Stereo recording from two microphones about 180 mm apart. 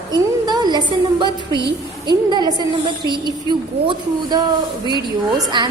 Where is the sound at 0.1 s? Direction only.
25° right (ahead or behind).